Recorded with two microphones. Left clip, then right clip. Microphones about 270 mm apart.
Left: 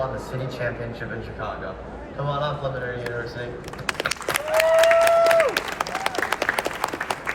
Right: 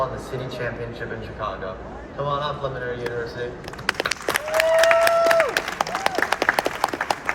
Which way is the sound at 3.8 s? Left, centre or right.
Right.